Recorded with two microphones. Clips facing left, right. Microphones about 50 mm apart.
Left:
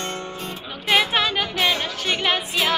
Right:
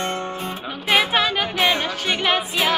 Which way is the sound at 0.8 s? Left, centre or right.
Centre.